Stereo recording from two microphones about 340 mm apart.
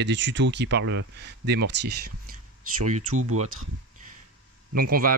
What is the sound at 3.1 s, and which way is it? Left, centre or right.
Speech, right.